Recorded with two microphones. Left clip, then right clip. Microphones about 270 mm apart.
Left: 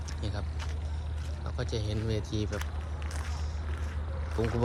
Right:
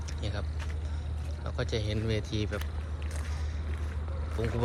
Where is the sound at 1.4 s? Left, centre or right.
Centre.